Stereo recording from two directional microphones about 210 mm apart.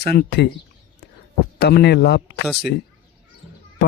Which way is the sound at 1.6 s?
50° left (ahead or behind).